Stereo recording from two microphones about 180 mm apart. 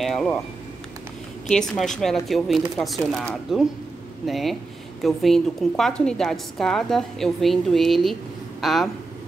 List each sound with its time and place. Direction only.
0.0 s speech: 5° left (ahead or behind)
1.5 s a woman's voice: centre (ahead or behind)